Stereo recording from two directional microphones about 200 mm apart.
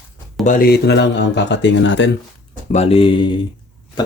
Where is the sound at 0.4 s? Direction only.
50° left (ahead or behind).